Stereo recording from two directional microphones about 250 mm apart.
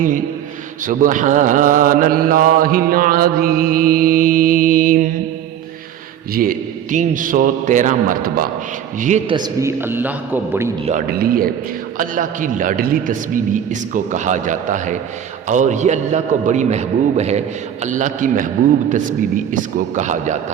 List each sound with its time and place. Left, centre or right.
0.9 s mantra: right
6.3 s mantra: right
9.0 s a man's voice: right
9.3 s a man's voice: centre
10.8 s mantra: right
15.4 s a man's voice: right
17.8 s mantra: right
20.0 s a man's voice: right